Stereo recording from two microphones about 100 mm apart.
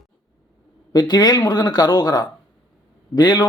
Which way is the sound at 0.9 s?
45° left (ahead or behind).